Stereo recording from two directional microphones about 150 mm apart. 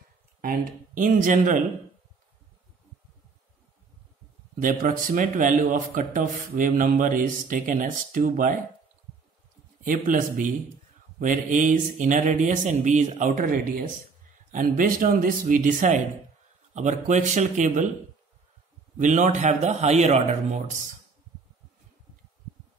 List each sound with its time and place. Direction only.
0.4 s speech: 65° right (ahead or behind)
4.6 s speech: 65° right (ahead or behind)
9.8 s speech: 65° right (ahead or behind)
18.9 s speech: 55° right (ahead or behind)